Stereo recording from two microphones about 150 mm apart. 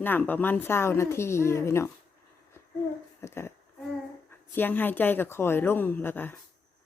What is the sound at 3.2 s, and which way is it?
A woman's voice, 15° left (ahead or behind).